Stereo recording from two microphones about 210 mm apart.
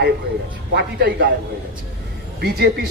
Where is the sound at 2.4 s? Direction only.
50° right (ahead or behind).